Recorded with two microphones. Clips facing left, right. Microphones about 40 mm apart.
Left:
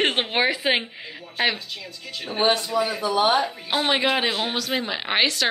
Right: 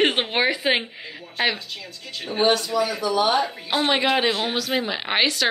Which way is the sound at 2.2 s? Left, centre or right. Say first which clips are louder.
Right 1 dB; centre.